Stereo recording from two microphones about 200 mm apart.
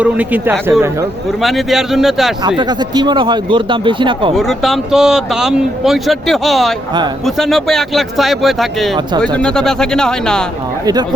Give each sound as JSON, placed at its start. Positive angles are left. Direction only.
{"t": 0.0, "sound": "speech", "side_deg": -10}
{"t": 2.6, "sound": "speech", "side_deg": -20}
{"t": 4.4, "sound": "speech", "side_deg": 0}